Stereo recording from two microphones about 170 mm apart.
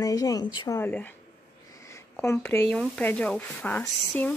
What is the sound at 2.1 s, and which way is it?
Speech, 15° left (ahead or behind).